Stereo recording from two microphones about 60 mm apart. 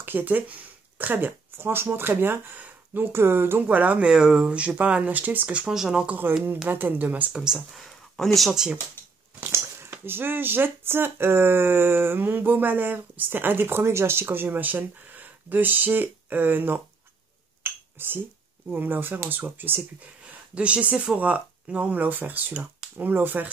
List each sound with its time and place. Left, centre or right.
0.0 s speech: right
4.1 s speech: centre
4.5 s speech: right
5.7 s speech: centre
6.0 s speech: right
7.5 s speech: centre
9.5 s speech: right
14.2 s speech: right
17.9 s speech: right
20.5 s speech: centre